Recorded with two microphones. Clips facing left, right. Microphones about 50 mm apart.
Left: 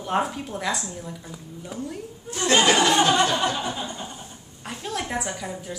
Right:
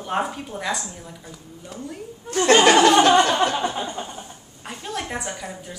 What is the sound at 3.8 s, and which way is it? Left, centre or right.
Chuckle, right.